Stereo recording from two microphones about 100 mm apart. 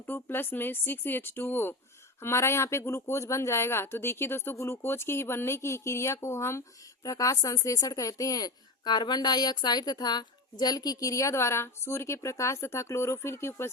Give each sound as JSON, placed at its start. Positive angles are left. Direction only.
{"t": 0.0, "sound": "speech", "side_deg": 20}